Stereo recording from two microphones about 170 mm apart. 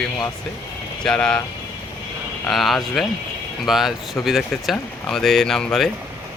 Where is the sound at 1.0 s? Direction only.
5° left (ahead or behind).